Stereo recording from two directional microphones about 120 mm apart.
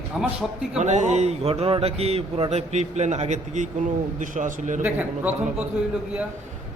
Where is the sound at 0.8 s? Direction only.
75° right (ahead or behind).